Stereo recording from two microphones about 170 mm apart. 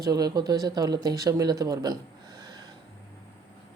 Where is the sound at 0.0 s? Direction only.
25° right (ahead or behind).